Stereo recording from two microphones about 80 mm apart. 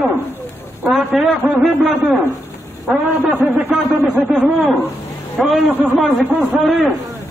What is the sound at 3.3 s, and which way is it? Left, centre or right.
Speech, centre.